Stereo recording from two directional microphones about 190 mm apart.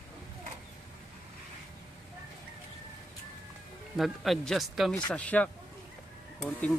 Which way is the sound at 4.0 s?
Centre (ahead or behind).